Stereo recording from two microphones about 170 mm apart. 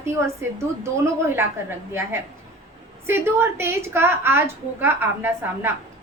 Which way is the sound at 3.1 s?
15° right (ahead or behind).